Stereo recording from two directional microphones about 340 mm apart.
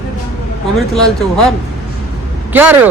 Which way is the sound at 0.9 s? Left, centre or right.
Centre.